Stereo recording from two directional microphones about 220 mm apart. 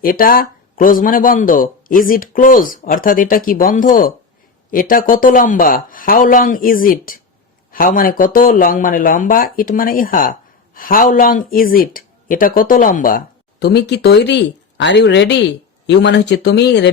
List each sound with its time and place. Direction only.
0.0 s speech: 40° left (ahead or behind)